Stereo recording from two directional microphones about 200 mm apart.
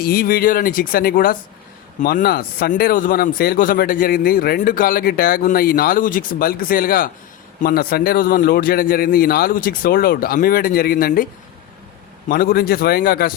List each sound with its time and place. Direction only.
0.0 s speech: 50° left (ahead or behind)
12.3 s speech: 45° left (ahead or behind)